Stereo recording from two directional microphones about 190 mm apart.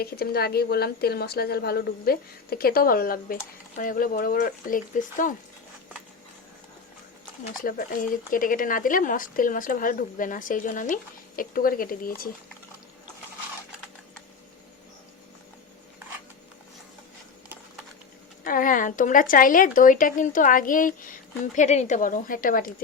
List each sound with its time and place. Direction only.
0.0 s speech: 55° left (ahead or behind)
7.6 s speech: 45° left (ahead or behind)
18.4 s speech: 45° left (ahead or behind)